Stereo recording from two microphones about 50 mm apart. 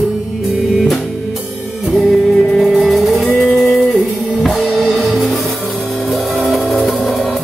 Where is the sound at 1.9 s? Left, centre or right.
Centre.